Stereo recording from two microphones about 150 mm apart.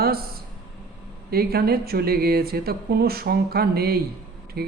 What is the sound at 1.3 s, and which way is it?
A woman's voice, 90° right.